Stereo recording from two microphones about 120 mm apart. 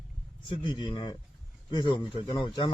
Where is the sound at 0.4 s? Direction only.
45° left (ahead or behind).